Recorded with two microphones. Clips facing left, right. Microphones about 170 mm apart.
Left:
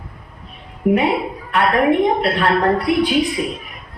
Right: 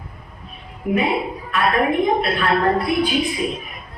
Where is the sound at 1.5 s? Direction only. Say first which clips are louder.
Left 3 dB; 80° left.